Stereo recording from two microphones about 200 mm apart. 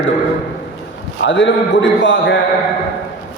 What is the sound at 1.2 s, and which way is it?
A man's voice, 65° left (ahead or behind).